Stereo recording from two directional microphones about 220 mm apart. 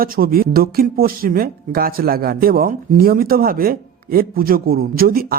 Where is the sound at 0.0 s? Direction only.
40° right (ahead or behind).